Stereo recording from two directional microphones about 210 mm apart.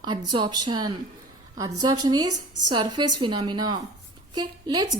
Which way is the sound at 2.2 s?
90° right.